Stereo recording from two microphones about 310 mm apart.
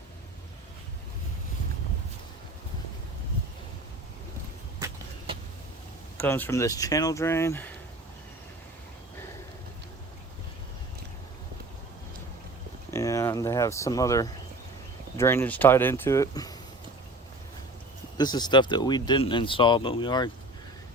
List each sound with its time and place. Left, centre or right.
4.8 s vehicle: centre
6.1 s speech: centre
12.9 s a sound: centre
15.2 s speech: centre
18.2 s speech: centre